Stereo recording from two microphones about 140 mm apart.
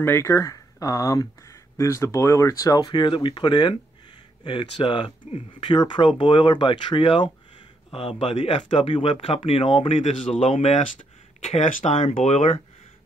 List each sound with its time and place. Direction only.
0.0 s speech: 20° left (ahead or behind); by 12.5 s 60° left (ahead or behind)